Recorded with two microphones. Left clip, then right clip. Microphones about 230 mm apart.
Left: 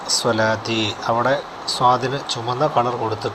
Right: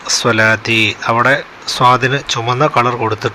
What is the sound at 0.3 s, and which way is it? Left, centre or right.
Speech, right.